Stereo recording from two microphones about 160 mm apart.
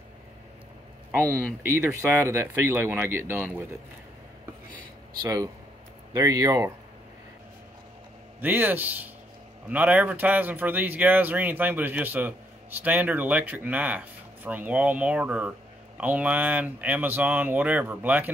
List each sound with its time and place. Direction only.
1.1 s speech: 15° right (ahead or behind)
5.2 s speech: 20° right (ahead or behind)
8.4 s speech: 10° right (ahead or behind)